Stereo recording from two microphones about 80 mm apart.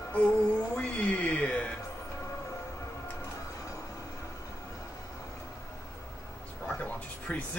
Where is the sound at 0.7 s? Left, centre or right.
Centre.